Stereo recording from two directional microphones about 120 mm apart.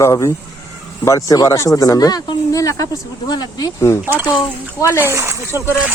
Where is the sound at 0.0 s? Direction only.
25° left (ahead or behind).